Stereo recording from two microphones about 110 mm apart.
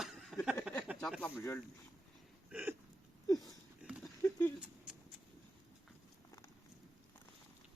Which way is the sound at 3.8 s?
5° right (ahead or behind).